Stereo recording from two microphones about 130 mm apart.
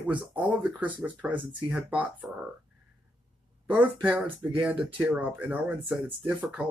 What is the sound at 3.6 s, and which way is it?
Speech, 10° right (ahead or behind).